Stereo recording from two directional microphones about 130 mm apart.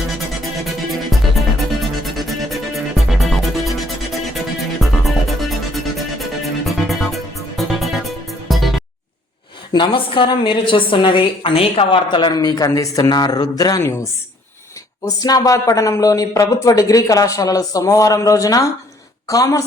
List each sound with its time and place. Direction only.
0.9 s music: centre (ahead or behind)
4.8 s music: centre (ahead or behind)
9.7 s a woman's voice: 40° left (ahead or behind)